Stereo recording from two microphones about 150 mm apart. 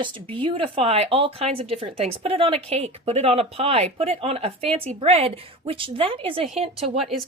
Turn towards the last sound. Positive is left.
turn(degrees=0)  # may be behind; listen again after turning